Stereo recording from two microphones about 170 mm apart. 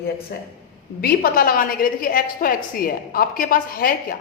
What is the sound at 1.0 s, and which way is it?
A woman's voice, 60° left (ahead or behind).